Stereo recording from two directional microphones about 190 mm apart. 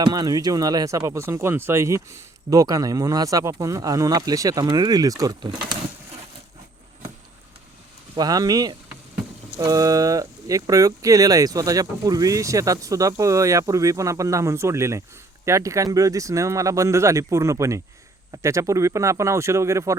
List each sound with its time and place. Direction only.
0.0 s speech: 20° right (ahead or behind)
8.1 s speech: 20° right (ahead or behind)